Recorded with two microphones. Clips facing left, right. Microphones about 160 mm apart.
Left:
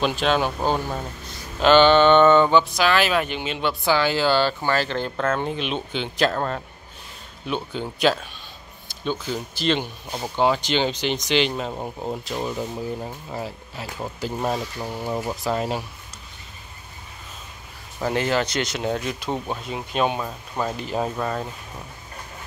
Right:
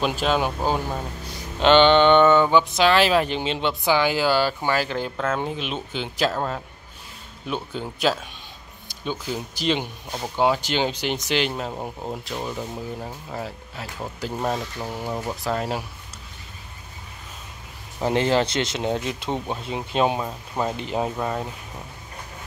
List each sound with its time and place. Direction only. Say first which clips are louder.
0.0 s speech: left 1 dB; 10° right (ahead or behind)
1.6 s speech: even; 20° right (ahead or behind)
2.7 s speech: right 2 dB; 30° right (ahead or behind)
3.6 s speech: left 1 dB; 15° right (ahead or behind); by 15.8 s 5° left (ahead or behind)
18.0 s speech: right 2 dB; 25° right (ahead or behind)